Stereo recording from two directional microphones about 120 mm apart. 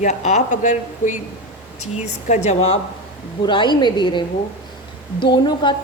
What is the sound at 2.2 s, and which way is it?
Speech, 75° left (ahead or behind).